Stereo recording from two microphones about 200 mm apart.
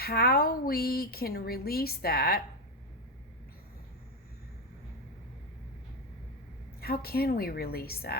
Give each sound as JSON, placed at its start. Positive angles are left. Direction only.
{"t": 0.0, "sound": "speech", "side_deg": 50}
{"t": 6.7, "sound": "speech", "side_deg": 50}